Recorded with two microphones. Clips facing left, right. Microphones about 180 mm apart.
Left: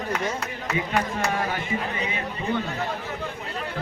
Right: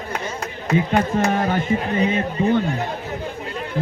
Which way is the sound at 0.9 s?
45° right (ahead or behind).